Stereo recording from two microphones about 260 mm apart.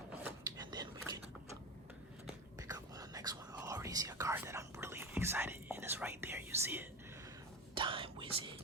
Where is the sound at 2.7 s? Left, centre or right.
Centre.